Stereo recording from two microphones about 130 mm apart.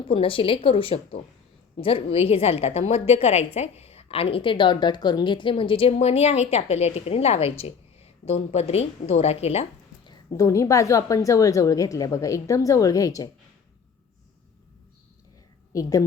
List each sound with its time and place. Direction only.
0.1 s a woman's voice: 45° left (ahead or behind)
10.1 s a woman's voice: 25° left (ahead or behind)
15.7 s a woman's voice: 25° left (ahead or behind)